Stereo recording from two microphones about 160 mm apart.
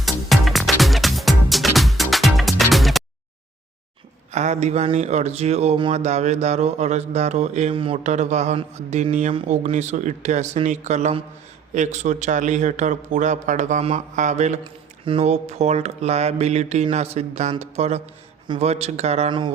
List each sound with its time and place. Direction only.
0.0 s music: centre (ahead or behind)
4.3 s speech: 45° right (ahead or behind)
14.6 s speech: 35° right (ahead or behind)